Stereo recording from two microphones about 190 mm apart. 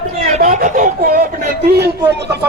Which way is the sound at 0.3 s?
35° right (ahead or behind).